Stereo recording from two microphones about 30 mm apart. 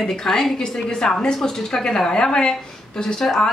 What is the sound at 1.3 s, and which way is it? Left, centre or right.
Speech, centre.